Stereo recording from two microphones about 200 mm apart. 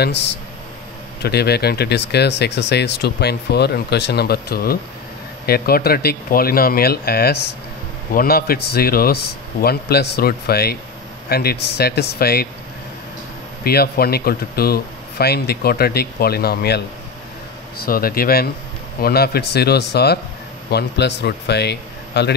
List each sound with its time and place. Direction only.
0.0 s speech: 60° left (ahead or behind)
13.7 s speech: 50° left (ahead or behind)
17.8 s speech: 45° left (ahead or behind)